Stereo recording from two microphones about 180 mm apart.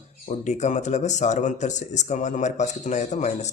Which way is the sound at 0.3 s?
40° left (ahead or behind).